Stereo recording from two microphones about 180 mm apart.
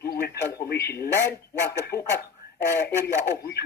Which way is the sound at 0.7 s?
65° left (ahead or behind).